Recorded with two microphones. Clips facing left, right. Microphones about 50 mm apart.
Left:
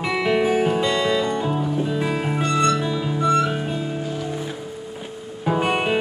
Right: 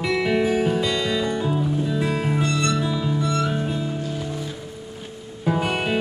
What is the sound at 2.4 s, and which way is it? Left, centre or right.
Music, left.